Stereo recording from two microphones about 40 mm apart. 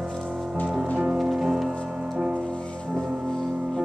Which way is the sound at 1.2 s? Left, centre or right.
Centre.